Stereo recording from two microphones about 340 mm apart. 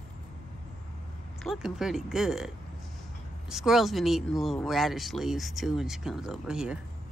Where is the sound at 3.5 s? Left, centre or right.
Centre.